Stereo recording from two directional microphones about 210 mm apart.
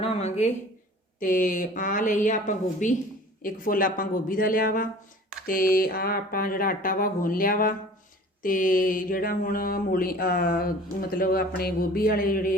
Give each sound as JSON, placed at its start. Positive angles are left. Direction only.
{"t": 0.0, "sound": "speech", "side_deg": 30}